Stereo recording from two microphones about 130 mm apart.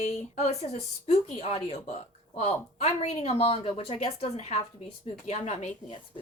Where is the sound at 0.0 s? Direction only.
55° left (ahead or behind).